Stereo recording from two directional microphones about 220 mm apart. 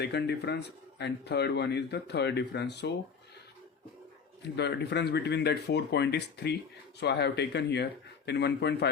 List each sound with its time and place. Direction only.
0.0 s speech: 50° left (ahead or behind)
4.4 s speech: 50° left (ahead or behind)